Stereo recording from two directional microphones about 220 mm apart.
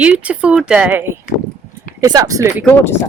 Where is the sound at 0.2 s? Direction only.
5° right (ahead or behind).